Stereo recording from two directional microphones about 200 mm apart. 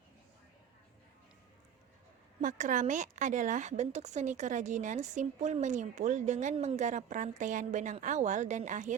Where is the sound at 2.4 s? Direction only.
40° right (ahead or behind).